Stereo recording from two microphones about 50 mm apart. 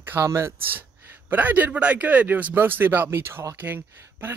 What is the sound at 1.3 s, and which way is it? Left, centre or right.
A man's voice, right.